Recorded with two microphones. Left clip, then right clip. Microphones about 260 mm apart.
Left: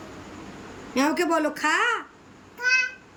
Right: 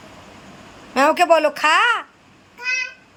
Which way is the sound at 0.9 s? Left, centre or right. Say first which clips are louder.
Right 9 dB; centre.